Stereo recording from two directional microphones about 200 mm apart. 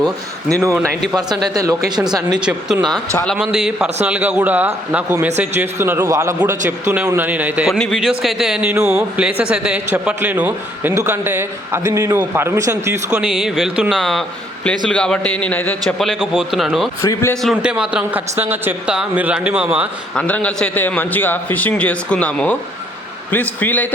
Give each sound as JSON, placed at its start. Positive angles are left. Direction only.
{"t": 1.5, "sound": "speech", "side_deg": -15}
{"t": 2.3, "sound": "a man's voice", "side_deg": -5}
{"t": 17.0, "sound": "a man's voice", "side_deg": 15}
{"t": 17.4, "sound": "speech", "side_deg": -5}
{"t": 20.1, "sound": "a man's voice", "side_deg": 5}